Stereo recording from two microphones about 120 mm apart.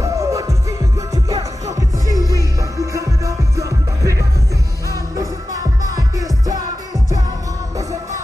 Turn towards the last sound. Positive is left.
turn(degrees=-30)  # may be behind; listen again after turning